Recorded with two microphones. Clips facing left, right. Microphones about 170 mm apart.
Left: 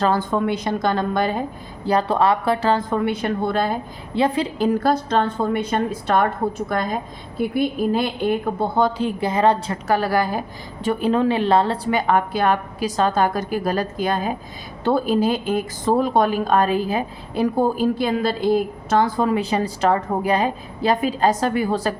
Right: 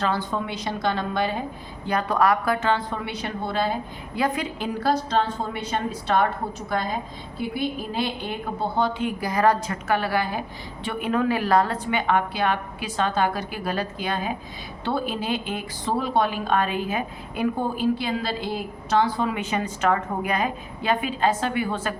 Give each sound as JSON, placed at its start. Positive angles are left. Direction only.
{"t": 0.0, "sound": "a woman's voice", "side_deg": 45}
{"t": 1.8, "sound": "a woman's voice", "side_deg": 30}
{"t": 4.1, "sound": "a woman's voice", "side_deg": 30}
{"t": 8.8, "sound": "a woman's voice", "side_deg": 35}
{"t": 10.8, "sound": "a woman's voice", "side_deg": 30}